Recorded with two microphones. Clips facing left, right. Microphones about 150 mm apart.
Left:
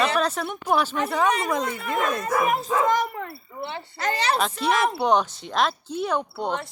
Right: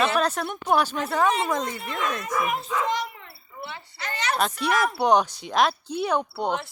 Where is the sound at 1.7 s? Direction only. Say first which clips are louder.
Left 4 dB; 50° left (ahead or behind).